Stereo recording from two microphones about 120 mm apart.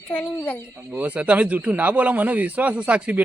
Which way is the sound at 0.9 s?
10° right (ahead or behind).